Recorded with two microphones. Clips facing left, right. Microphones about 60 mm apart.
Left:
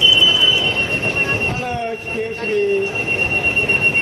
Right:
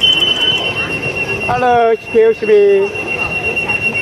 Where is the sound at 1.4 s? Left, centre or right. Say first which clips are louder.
Right 12 dB; right.